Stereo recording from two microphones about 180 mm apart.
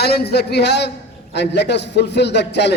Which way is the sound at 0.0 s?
65° left (ahead or behind).